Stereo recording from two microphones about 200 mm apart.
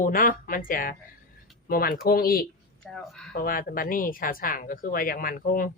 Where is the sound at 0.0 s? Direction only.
45° left (ahead or behind).